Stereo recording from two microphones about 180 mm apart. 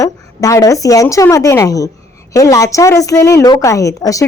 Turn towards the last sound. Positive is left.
turn(degrees=20)  # may be behind; listen again after turning